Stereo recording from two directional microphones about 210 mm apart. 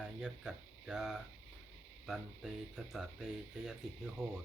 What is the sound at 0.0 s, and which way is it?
Speech, 5° right (ahead or behind).